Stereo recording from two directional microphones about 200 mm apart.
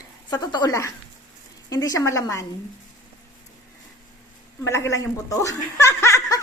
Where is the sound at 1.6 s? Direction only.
20° left (ahead or behind).